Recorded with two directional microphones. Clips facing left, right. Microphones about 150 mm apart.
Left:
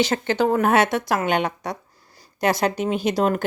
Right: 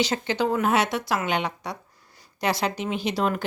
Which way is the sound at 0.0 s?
50° left (ahead or behind).